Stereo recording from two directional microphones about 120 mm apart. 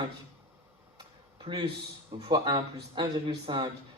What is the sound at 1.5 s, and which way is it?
Speech, 45° right (ahead or behind).